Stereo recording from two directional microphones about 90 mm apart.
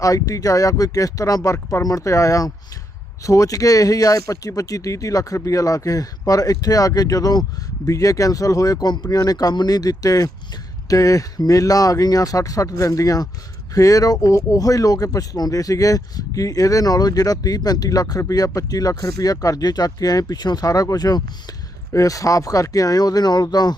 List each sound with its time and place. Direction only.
0.0 s speech: 40° left (ahead or behind)
1.8 s speech: 40° left (ahead or behind)